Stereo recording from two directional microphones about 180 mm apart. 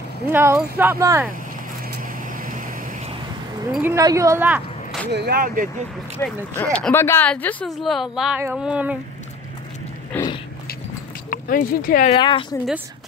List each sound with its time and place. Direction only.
0.3 s speech: 10° right (ahead or behind)
2.3 s vehicle: 50° right (ahead or behind)
3.7 s speech: 15° right (ahead or behind)
5.1 s speech: 60° right (ahead or behind)
6.1 s speech: 10° left (ahead or behind); by 8.9 s 5° right (ahead or behind)
10.1 s biting: 10° left (ahead or behind)
11.2 s speech: 50° left (ahead or behind)
12.1 s speech: 30° left (ahead or behind)